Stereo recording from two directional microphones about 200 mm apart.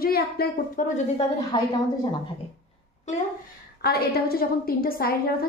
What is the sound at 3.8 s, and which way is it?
A woman's voice, 50° left (ahead or behind).